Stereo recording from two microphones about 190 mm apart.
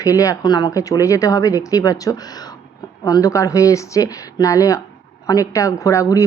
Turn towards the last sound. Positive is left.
turn(degrees=15)  # may be behind; listen again after turning